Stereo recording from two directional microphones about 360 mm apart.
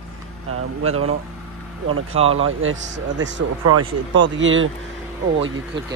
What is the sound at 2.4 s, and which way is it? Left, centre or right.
Speech, right.